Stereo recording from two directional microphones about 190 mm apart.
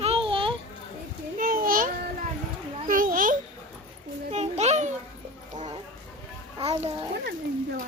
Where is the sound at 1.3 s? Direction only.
45° right (ahead or behind).